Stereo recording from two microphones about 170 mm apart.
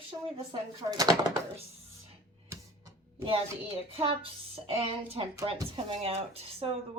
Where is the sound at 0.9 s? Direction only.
20° right (ahead or behind).